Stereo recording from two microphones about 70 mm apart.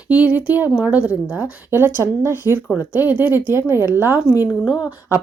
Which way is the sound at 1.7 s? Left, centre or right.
Right.